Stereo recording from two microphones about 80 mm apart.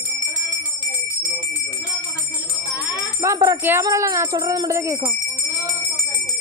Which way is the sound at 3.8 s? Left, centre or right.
Right.